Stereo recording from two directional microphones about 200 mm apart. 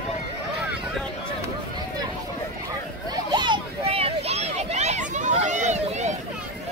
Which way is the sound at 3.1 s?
20° right (ahead or behind).